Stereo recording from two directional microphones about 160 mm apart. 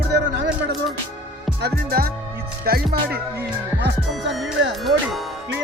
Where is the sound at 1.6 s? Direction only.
70° right (ahead or behind).